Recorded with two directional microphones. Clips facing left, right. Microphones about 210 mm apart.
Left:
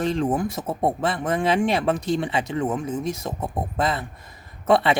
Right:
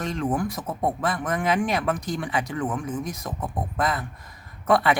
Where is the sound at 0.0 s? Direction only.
30° left (ahead or behind).